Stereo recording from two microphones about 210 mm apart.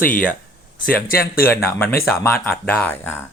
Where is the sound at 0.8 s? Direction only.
45° left (ahead or behind).